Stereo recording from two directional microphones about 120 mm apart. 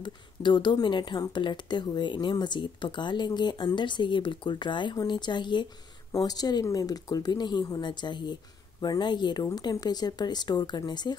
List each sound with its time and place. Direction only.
0.0 s a woman's voice: 40° left (ahead or behind)